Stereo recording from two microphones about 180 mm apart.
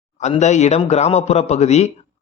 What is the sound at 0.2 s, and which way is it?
Speech, 40° left (ahead or behind).